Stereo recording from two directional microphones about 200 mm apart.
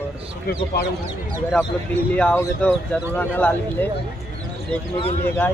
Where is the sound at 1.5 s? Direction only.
5° left (ahead or behind).